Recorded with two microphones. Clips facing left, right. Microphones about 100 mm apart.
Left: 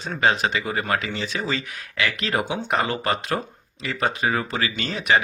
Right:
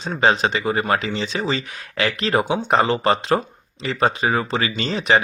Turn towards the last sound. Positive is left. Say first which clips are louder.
# right 3 dB
turn(degrees=-30)  # may be behind; listen again after turning